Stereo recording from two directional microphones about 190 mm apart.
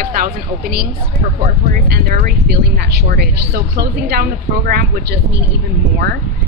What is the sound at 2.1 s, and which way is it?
Speech, 50° right (ahead or behind).